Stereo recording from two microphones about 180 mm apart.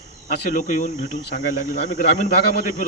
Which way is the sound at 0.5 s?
50° left (ahead or behind).